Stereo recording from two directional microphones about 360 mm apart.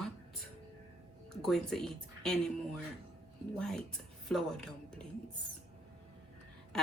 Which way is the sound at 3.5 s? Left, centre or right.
Centre.